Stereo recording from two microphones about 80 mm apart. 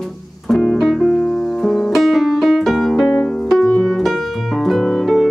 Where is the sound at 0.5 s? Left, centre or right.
Centre.